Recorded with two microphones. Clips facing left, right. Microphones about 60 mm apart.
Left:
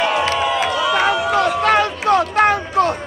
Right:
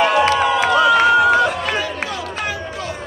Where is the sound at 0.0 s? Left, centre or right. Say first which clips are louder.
Right 3 dB; right.